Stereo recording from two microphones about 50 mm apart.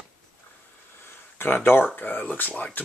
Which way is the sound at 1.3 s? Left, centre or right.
Left.